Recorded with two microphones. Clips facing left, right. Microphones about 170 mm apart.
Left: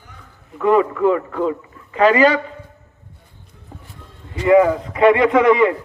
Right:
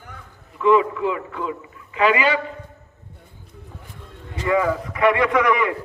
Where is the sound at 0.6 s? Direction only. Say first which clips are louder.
Left 2 dB; 50° left (ahead or behind).